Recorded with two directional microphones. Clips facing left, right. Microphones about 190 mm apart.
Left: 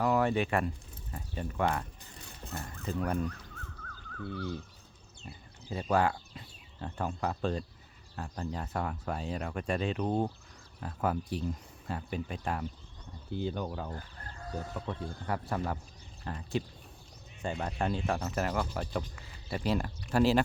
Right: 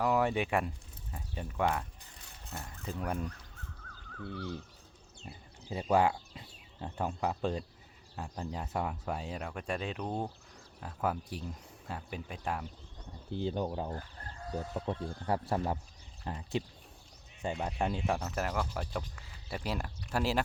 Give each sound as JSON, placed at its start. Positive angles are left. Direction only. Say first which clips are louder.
{"t": 0.0, "sound": "speech", "louder": "left 2 dB", "side_deg": -10}
{"t": 5.2, "sound": "speech", "louder": "even", "side_deg": -20}
{"t": 10.1, "sound": "speech", "louder": "left 6 dB", "side_deg": 15}
{"t": 10.8, "sound": "speech", "louder": "left 2 dB", "side_deg": -5}
{"t": 13.3, "sound": "speech", "louder": "right 1 dB", "side_deg": -30}
{"t": 18.2, "sound": "speech", "louder": "left 2 dB", "side_deg": 0}